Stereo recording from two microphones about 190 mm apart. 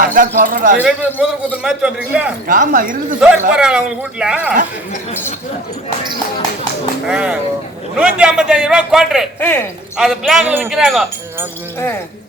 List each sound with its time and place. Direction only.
0.0 s speech: 45° right (ahead or behind)
0.8 s a man's voice: 5° right (ahead or behind)
2.5 s speech: 45° right (ahead or behind)
3.2 s a man's voice: 5° right (ahead or behind)
7.1 s a man's voice: 5° right (ahead or behind)
9.4 s speech: 10° left (ahead or behind)
10.0 s a man's voice: centre (ahead or behind)